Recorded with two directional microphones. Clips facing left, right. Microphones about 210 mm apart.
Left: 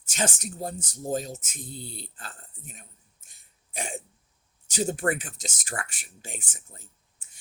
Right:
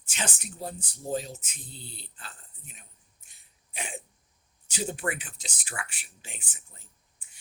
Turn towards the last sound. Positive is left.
turn(degrees=45)  # may be behind; listen again after turning